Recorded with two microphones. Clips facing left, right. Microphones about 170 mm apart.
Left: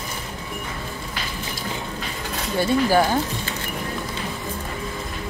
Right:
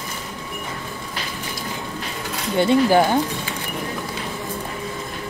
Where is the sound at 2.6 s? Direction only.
20° right (ahead or behind).